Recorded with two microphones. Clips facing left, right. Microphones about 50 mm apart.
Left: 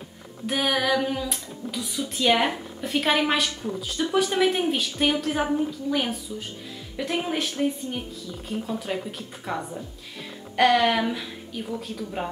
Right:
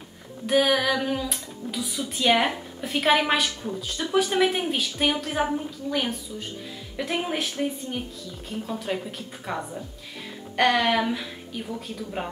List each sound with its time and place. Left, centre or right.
0.5 s a woman's voice: centre